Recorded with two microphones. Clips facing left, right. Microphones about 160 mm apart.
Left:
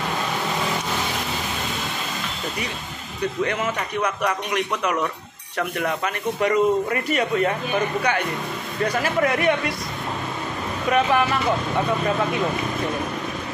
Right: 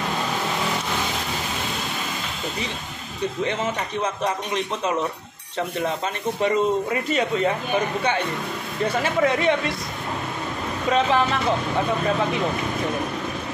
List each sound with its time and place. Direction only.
3.4 s speech: 25° right (ahead or behind)
8.8 s speech: 25° right (ahead or behind)
10.9 s speech: 25° right (ahead or behind)